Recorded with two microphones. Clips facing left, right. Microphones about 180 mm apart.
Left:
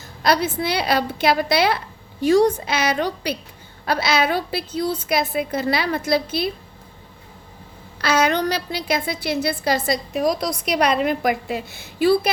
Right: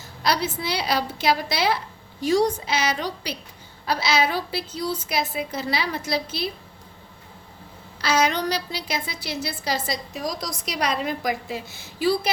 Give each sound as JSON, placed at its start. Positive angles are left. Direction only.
{"t": 0.2, "sound": "a woman's voice", "side_deg": 55}
{"t": 8.0, "sound": "a woman's voice", "side_deg": 55}